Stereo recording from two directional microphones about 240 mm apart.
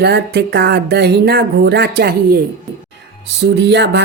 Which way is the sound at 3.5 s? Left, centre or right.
Right.